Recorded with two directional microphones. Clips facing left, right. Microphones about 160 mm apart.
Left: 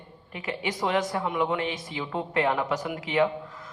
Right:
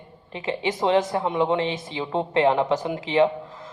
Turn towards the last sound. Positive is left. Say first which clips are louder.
# right 4 dB
turn(degrees=-25)  # may be behind; listen again after turning